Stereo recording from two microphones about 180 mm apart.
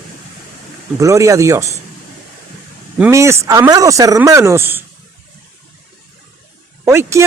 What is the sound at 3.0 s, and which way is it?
Speech, 15° right (ahead or behind).